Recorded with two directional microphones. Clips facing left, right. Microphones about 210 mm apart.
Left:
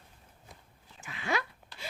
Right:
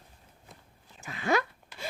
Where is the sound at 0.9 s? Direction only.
40° right (ahead or behind).